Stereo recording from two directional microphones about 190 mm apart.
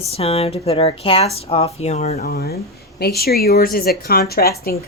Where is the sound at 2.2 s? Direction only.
55° left (ahead or behind).